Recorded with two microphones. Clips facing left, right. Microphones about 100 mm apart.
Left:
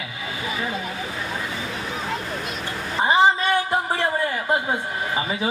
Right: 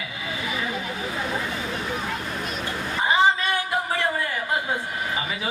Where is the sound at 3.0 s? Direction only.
30° left (ahead or behind).